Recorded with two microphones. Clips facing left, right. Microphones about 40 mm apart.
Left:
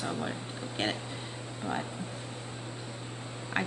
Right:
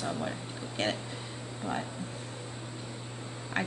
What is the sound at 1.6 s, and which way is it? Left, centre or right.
Speech, left.